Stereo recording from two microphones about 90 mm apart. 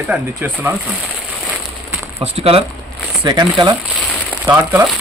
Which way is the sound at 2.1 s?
90° right.